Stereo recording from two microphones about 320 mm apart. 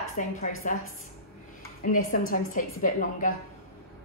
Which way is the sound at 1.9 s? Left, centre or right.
Left.